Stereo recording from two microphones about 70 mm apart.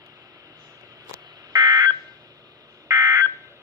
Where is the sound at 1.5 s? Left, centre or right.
Right.